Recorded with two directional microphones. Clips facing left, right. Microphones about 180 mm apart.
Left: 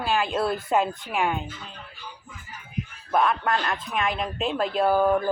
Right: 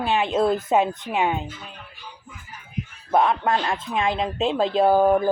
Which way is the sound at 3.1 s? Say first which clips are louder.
Right 3 dB; 25° right (ahead or behind).